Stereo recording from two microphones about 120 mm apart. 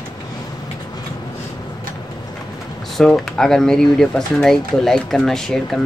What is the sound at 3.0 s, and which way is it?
Speech, 5° left (ahead or behind).